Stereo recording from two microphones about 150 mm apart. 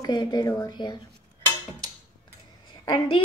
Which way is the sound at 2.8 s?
30° left (ahead or behind).